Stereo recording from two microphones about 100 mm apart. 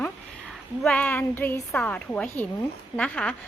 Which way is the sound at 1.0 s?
20° left (ahead or behind).